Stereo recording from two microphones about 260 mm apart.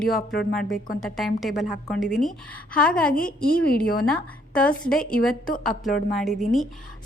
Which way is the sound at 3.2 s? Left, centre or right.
Left.